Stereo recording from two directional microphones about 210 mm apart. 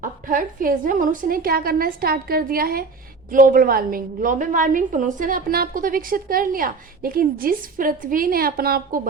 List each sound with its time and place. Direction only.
0.0 s a woman's voice: 40° right (ahead or behind)